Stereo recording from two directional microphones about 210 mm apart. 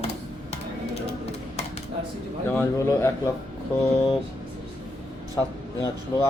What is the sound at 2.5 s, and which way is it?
Speech, 10° left (ahead or behind).